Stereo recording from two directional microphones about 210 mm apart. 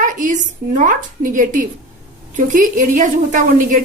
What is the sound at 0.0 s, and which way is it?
A woman's voice, 40° right (ahead or behind).